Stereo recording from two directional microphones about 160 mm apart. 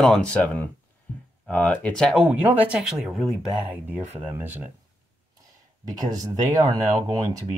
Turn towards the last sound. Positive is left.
turn(degrees=-20)  # may be behind; listen again after turning